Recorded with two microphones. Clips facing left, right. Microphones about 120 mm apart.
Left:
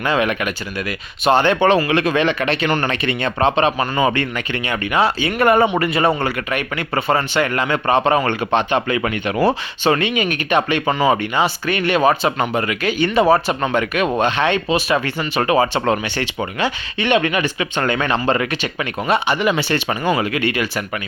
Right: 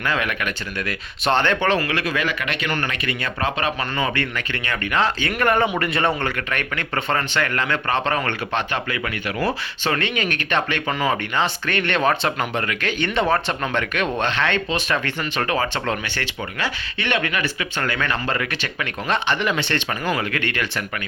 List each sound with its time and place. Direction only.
0.0 s speech: 20° left (ahead or behind)
0.8 s speech: 5° left (ahead or behind); by 9.6 s 25° left (ahead or behind)
9.8 s speech: 15° left (ahead or behind)